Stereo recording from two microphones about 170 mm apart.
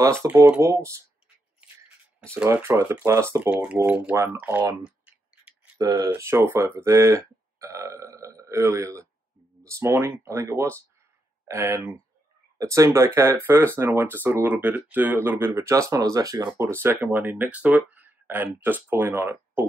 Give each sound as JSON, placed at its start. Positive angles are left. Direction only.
{"t": 0.0, "sound": "speech", "side_deg": -15}
{"t": 2.3, "sound": "speech", "side_deg": -15}
{"t": 4.1, "sound": "speech", "side_deg": -20}
{"t": 4.4, "sound": "speech", "side_deg": -10}
{"t": 4.8, "sound": "clicking", "side_deg": -5}
{"t": 5.8, "sound": "speech", "side_deg": -25}